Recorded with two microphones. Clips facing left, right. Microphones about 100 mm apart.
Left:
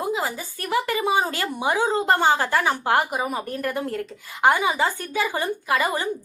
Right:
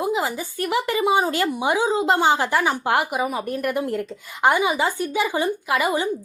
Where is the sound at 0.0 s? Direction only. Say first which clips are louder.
Right 3 dB; 20° right (ahead or behind).